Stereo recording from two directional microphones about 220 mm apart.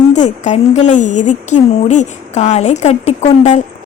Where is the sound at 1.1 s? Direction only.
90° left.